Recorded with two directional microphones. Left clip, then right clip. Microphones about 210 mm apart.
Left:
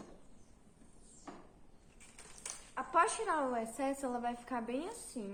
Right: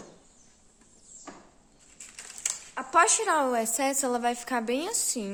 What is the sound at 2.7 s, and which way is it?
A woman's voice, 55° right (ahead or behind).